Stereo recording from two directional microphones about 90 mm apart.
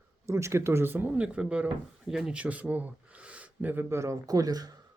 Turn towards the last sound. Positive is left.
turn(degrees=-45)  # may be behind; listen again after turning